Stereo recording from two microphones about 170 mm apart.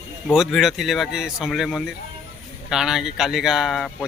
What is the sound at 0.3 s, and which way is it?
Speech, centre (ahead or behind).